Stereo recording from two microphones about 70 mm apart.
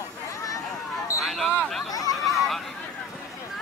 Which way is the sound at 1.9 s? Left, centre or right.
Left.